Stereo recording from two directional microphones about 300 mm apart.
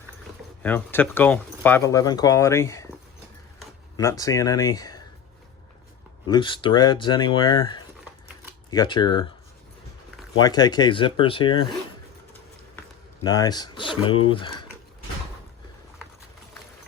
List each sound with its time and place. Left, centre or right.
0.6 s speech: centre
3.9 s speech: centre
6.2 s speech: centre
10.3 s speech: centre
13.2 s speech: centre